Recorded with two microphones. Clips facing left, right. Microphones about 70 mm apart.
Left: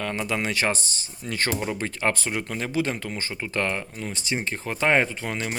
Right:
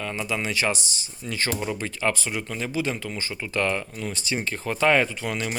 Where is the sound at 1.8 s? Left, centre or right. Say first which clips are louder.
Even; left.